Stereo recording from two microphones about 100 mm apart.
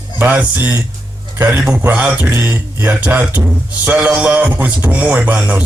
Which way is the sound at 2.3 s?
20° right (ahead or behind).